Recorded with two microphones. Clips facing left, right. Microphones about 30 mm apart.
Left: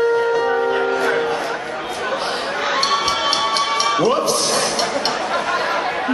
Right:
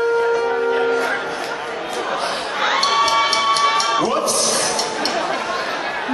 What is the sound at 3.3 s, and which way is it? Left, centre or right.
Music, centre.